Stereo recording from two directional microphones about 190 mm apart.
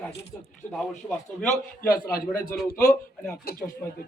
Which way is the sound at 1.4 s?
45° left (ahead or behind).